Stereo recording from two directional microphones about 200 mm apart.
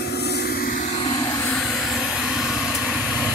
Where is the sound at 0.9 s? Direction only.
20° left (ahead or behind).